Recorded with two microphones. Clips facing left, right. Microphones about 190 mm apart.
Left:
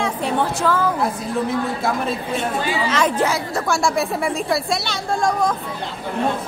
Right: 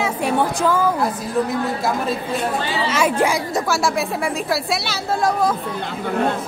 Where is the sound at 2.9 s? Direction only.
10° right (ahead or behind).